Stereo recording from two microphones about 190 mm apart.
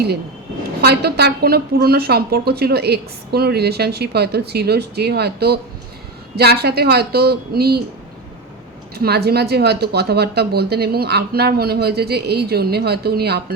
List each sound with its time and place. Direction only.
0.8 s a woman's voice: 55° right (ahead or behind)
9.0 s a woman's voice: 55° right (ahead or behind)